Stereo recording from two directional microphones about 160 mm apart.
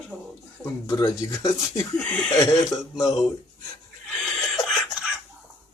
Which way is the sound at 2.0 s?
5° left (ahead or behind).